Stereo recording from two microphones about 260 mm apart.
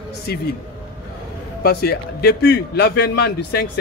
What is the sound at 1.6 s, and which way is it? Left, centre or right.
A man's voice, left.